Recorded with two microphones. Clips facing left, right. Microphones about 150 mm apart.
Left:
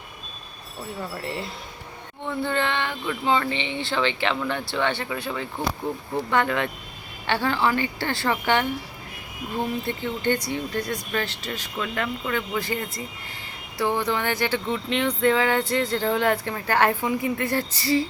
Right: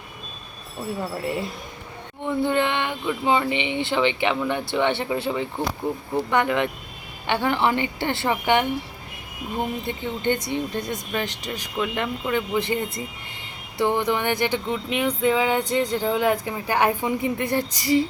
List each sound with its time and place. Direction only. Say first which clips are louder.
2.2 s speech: right 4 dB; 15° right (ahead or behind)